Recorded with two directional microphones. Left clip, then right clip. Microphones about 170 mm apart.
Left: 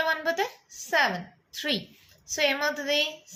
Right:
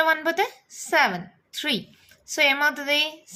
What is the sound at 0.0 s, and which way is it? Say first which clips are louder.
A woman's voice: right 5 dB; 45° right (ahead or behind).